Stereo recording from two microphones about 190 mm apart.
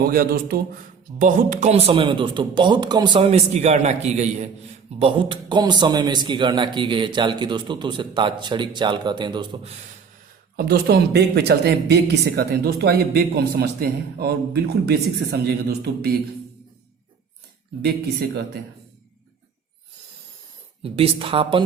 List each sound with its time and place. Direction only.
0.0 s speech: 55° right (ahead or behind)
1.2 s a man's voice: 40° right (ahead or behind); by 9.7 s 25° right (ahead or behind)
10.6 s speech: 55° right (ahead or behind)
17.8 s speech: 60° right (ahead or behind)
20.8 s a man's voice: 30° right (ahead or behind)